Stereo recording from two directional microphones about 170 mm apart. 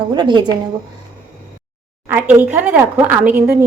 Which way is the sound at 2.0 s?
10° right (ahead or behind).